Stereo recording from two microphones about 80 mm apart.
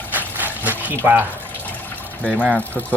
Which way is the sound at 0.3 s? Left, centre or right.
Right.